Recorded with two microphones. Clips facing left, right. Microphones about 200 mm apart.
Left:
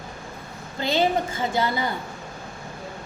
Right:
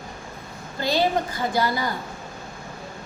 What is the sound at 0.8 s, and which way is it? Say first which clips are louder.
A woman's voice: even; 20° left (ahead or behind).